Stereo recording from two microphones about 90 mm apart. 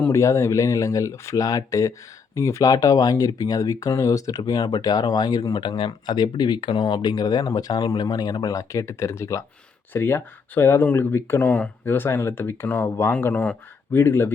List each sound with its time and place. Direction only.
0.1 s speech: 35° left (ahead or behind)